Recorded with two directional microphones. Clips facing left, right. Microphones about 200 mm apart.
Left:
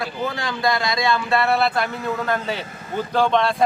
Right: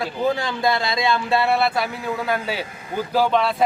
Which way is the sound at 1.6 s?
5° right (ahead or behind).